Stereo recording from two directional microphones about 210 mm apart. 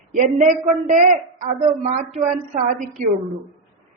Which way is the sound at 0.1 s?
40° right (ahead or behind).